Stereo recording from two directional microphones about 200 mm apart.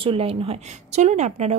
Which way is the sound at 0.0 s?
30° right (ahead or behind).